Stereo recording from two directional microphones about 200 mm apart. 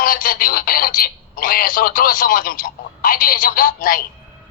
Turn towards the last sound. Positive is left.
turn(degrees=45)  # may be behind; listen again after turning